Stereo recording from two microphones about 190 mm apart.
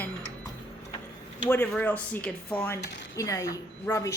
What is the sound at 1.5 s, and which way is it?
A woman's voice, 10° left (ahead or behind).